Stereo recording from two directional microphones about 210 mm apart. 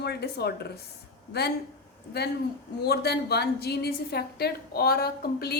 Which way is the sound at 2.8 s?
50° left (ahead or behind).